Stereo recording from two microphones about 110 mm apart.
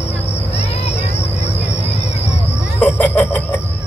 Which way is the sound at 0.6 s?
70° left (ahead or behind).